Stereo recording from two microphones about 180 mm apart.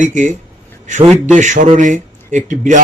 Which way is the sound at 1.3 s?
45° right (ahead or behind).